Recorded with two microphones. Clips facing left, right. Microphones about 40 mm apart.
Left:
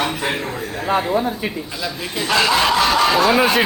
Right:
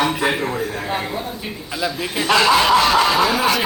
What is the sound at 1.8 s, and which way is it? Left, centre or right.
A man's voice, centre.